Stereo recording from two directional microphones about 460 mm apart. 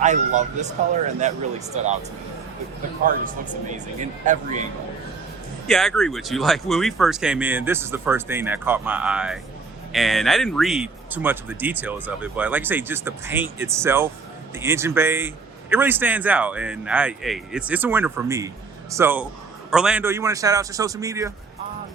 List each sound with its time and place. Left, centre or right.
0.0 s a man's voice: centre
4.3 s a man's voice: centre
5.6 s a man's voice: centre